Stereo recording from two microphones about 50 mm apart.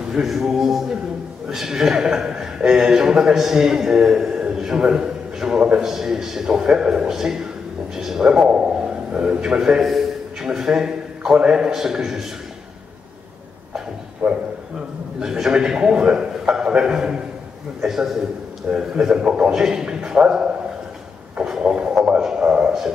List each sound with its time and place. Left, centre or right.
0.1 s a man's voice: centre
8.4 s a sound: centre
9.6 s a man's voice: centre
11.7 s a man's voice: centre
14.2 s a man's voice: right
15.1 s a man's voice: centre
21.5 s a sound: centre
22.2 s a man's voice: centre